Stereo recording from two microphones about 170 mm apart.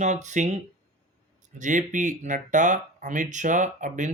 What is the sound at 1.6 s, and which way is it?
Speech, 50° right (ahead or behind).